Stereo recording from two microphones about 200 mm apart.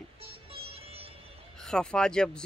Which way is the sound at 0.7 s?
30° right (ahead or behind).